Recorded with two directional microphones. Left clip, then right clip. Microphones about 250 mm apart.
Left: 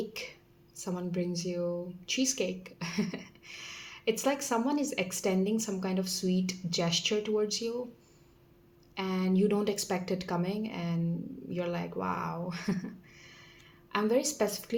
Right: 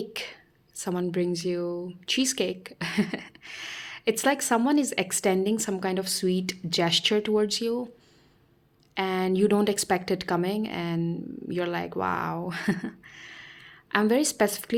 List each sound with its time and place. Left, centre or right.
0.0 s a sound: right
0.8 s a woman's voice: right
9.0 s a woman's voice: right